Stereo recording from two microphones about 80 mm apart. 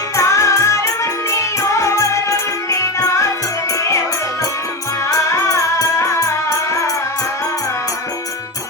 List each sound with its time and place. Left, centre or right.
0.2 s music: left
5.1 s music: left